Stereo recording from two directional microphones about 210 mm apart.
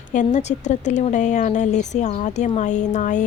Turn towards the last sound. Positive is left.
turn(degrees=35)  # may be behind; listen again after turning